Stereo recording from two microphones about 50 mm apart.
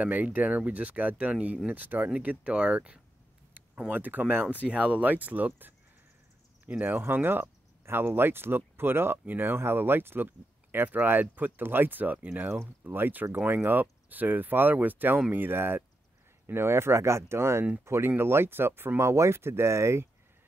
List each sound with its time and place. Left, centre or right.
0.0 s speech: right
3.9 s speech: right
4.6 s speech: right
9.2 s speech: right
18.9 s speech: right